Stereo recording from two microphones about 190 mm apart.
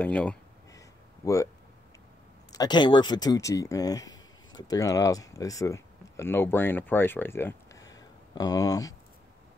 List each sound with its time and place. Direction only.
0.0 s speech: 5° left (ahead or behind)
0.7 s a sound: 15° left (ahead or behind)
2.5 s speech: 20° left (ahead or behind)